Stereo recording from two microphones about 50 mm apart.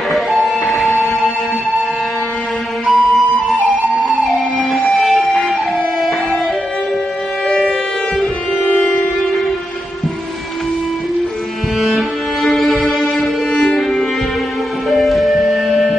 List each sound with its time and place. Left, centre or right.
0.1 s music: centre
2.9 s music: centre
7.4 s civil defense siren: centre
8.6 s music: left
12.4 s music: centre
13.5 s violin: centre
14.9 s music: centre